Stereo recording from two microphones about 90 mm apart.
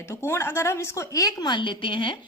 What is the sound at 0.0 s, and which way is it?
A woman's voice, 30° left (ahead or behind).